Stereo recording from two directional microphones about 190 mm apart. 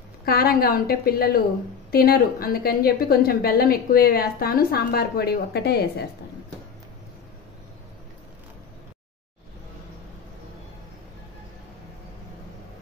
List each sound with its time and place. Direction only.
0.2 s a woman's voice: 55° left (ahead or behind)